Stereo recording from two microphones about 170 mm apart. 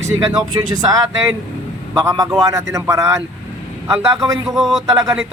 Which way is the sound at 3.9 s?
15° right (ahead or behind).